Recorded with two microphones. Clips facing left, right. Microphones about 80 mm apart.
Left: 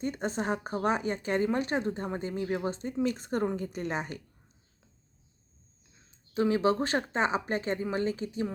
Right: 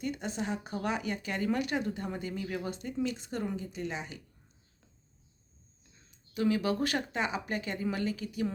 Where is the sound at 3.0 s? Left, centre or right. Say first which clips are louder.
Left 5 dB; left.